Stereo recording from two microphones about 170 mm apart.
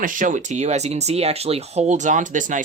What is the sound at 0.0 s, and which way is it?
Speech, 50° right (ahead or behind).